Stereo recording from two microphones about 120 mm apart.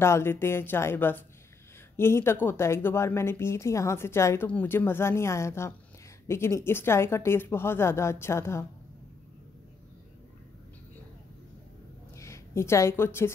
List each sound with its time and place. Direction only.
0.0 s a woman's voice: 20° left (ahead or behind)
12.2 s a woman's voice: 25° left (ahead or behind)